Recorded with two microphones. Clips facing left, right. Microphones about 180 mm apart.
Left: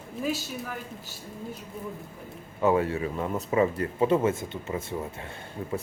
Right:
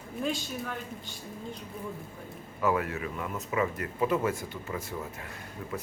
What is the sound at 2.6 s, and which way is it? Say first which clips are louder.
Speech: left 5 dB; 25° left (ahead or behind).